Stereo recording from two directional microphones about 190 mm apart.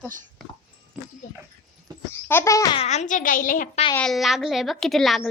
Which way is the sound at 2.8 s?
35° left (ahead or behind).